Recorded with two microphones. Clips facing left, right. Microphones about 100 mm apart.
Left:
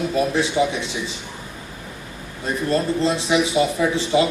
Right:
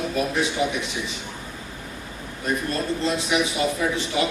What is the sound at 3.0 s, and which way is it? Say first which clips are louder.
A man's voice: left 4 dB; 30° left (ahead or behind).